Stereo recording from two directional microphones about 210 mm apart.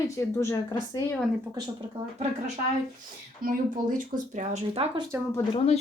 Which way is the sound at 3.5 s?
40° right (ahead or behind).